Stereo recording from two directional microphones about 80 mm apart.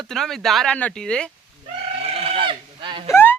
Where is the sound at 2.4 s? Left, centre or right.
Right.